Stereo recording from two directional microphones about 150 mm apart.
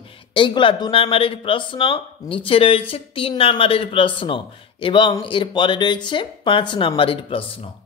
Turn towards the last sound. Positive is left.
turn(degrees=35)  # may be behind; listen again after turning